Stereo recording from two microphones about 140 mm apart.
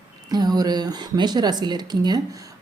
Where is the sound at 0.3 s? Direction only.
30° right (ahead or behind).